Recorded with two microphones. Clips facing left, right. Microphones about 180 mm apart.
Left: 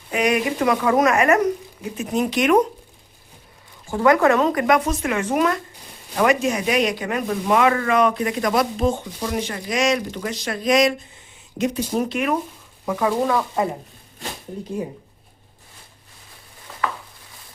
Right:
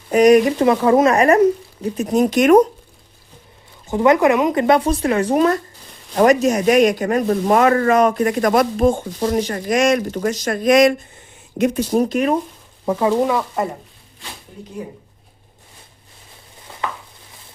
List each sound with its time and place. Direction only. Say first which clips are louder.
0.1 s speech: right 9 dB; 40° right (ahead or behind)
0.6 s speech: right 4 dB; 30° right (ahead or behind)
3.8 s speech: right 2 dB; 20° right (ahead or behind)
4.5 s speech: right 4 dB; 30° right (ahead or behind); by 11.8 s 55° right (ahead or behind)
11.9 s speech: right 5 dB; 40° right (ahead or behind)
12.8 s speech: right 4 dB; 25° right (ahead or behind)
13.2 s speech: right 1 dB; 10° right (ahead or behind)